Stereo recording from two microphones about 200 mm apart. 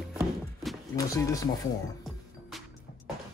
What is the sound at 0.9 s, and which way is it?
Speech, 15° left (ahead or behind).